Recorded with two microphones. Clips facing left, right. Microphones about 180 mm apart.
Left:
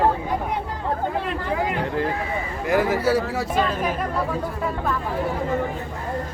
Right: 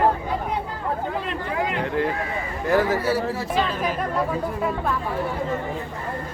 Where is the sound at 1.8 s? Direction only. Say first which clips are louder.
Right 1 dB; 30° left (ahead or behind).